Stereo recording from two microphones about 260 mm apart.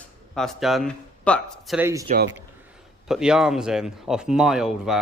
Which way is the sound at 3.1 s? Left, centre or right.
Centre.